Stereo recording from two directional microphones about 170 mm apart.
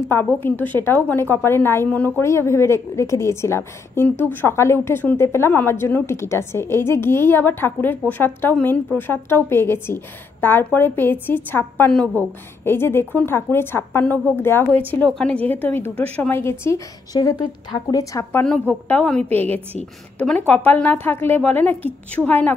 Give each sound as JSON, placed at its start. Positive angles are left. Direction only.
{"t": 0.1, "sound": "a woman's voice", "side_deg": 10}
{"t": 18.4, "sound": "a woman's voice", "side_deg": 5}